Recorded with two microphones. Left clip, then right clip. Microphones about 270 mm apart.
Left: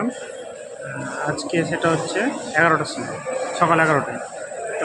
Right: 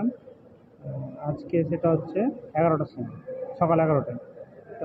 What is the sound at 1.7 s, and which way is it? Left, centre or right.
Speech, left.